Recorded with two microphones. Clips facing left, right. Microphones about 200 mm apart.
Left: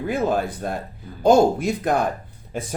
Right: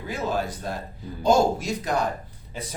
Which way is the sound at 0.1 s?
55° left (ahead or behind).